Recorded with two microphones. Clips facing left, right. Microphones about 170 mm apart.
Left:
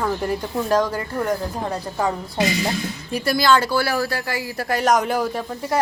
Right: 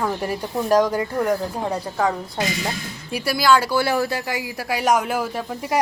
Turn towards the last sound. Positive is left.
turn(degrees=-10)  # may be behind; listen again after turning